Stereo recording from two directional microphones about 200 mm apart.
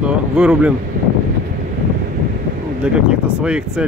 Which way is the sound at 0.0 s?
5° right (ahead or behind).